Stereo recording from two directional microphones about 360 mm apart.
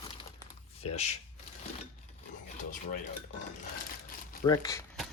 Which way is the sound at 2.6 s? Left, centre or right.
Left.